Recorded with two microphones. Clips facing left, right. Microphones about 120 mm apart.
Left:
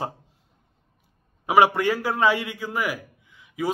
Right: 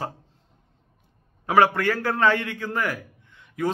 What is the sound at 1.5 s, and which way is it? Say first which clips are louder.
A man's voice: left 1 dB; 15° left (ahead or behind).